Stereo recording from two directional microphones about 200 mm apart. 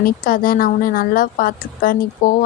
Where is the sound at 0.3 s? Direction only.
45° left (ahead or behind).